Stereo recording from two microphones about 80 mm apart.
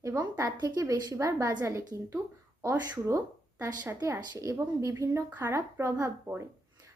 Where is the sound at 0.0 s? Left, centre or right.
Right.